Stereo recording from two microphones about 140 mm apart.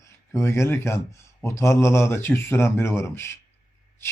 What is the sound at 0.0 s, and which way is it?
Speech, 20° left (ahead or behind).